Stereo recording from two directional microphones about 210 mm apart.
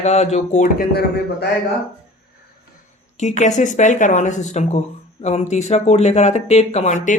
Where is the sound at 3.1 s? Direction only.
35° left (ahead or behind).